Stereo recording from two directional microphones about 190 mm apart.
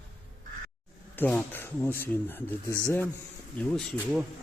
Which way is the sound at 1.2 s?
5° left (ahead or behind).